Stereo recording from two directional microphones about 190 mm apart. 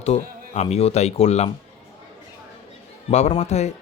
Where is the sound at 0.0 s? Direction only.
35° left (ahead or behind).